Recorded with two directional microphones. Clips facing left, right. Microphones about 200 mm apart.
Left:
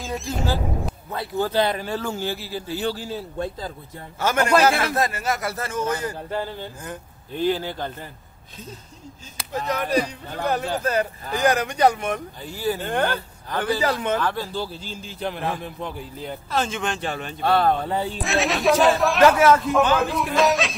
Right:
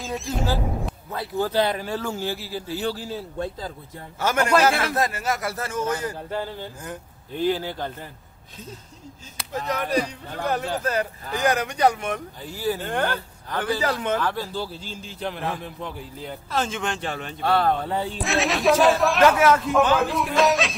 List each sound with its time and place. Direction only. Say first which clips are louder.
0.0 s speech: even; centre (ahead or behind)
4.5 s a man's voice: left 2 dB; 15° left (ahead or behind)
4.9 s speech: left 1 dB; 10° right (ahead or behind)
9.4 s speech: left 1 dB; centre (ahead or behind)
10.8 s speech: left 2 dB; 20° left (ahead or behind)
11.3 s speech: left 2 dB; 35° left (ahead or behind)
12.4 s speech: left 1 dB; 5° right (ahead or behind)
12.8 s speech: left 2 dB; 25° left (ahead or behind)
14.2 s speech: left 1 dB; 5° right (ahead or behind); by 15.9 s 15° left (ahead or behind)
16.4 s speech: left 1 dB; centre (ahead or behind)
17.4 s speech: left 2 dB; 25° left (ahead or behind)
18.2 s speech: even; centre (ahead or behind)